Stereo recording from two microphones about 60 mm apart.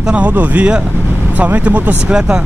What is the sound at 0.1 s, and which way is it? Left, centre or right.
Speech, right.